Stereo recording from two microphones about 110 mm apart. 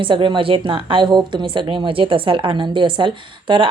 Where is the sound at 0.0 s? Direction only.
50° right (ahead or behind).